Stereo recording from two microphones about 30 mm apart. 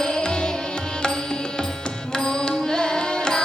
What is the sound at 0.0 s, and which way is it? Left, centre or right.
Music, left.